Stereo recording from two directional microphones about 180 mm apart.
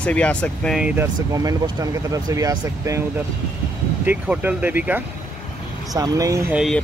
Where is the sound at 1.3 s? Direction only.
20° right (ahead or behind).